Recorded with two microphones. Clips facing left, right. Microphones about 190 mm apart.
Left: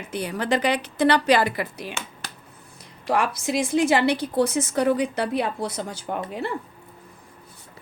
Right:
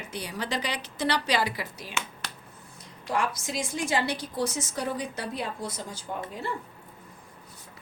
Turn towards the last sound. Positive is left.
turn(degrees=70)  # may be behind; listen again after turning